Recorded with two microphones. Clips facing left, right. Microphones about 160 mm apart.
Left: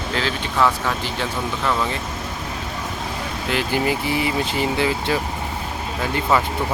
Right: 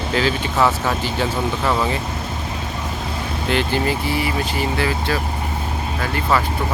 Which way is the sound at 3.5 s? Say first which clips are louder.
Right 3 dB; 5° left (ahead or behind).